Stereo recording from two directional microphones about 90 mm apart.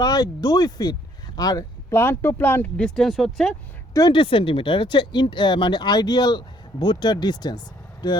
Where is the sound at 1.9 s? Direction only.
25° left (ahead or behind).